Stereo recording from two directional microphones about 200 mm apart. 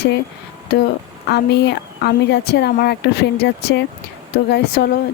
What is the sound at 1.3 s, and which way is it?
Speech, 55° left (ahead or behind).